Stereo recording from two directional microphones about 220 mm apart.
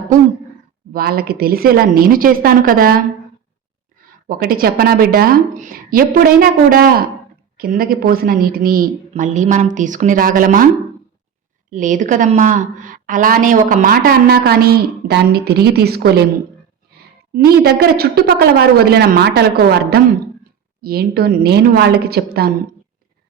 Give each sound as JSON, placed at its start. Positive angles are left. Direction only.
{"t": 0.9, "sound": "a woman's voice", "side_deg": -45}
{"t": 4.3, "sound": "a woman's voice", "side_deg": -40}
{"t": 11.7, "sound": "a woman's voice", "side_deg": -35}
{"t": 17.3, "sound": "a woman's voice", "side_deg": -45}